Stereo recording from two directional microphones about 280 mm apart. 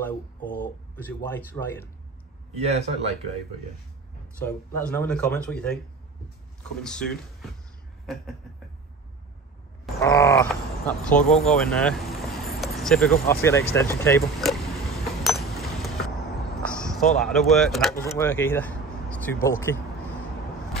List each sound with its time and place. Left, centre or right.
0.4 s a sound: left
0.9 s speech: centre
4.4 s speech: centre
6.8 s speech: centre
10.0 s speech: centre
15.2 s a sound: centre
17.1 s speech: centre